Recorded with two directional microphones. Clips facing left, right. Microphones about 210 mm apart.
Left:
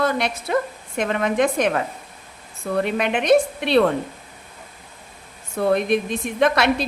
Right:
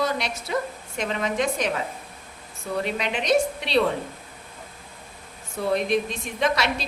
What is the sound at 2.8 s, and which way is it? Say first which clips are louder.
Speech: left 7 dB; 55° left (ahead or behind).